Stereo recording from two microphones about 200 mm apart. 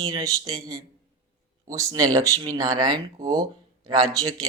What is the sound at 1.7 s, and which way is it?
A man's voice, 15° right (ahead or behind).